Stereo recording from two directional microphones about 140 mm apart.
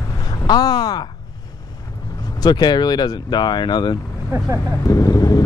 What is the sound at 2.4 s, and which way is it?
Speech, 30° left (ahead or behind).